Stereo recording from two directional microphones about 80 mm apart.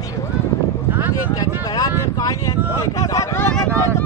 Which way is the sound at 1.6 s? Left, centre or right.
Left.